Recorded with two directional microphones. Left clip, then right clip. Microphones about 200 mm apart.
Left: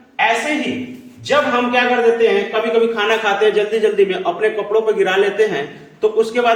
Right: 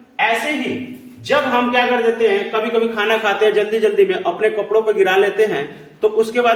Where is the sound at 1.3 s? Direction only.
20° right (ahead or behind).